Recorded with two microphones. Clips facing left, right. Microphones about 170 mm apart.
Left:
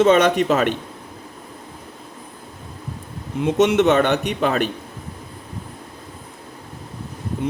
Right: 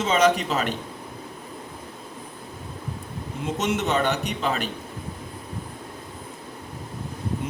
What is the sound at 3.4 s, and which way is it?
A man's voice, 70° left (ahead or behind).